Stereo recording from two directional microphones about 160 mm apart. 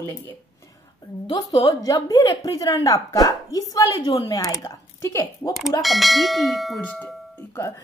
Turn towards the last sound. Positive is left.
turn(degrees=15)  # may be behind; listen again after turning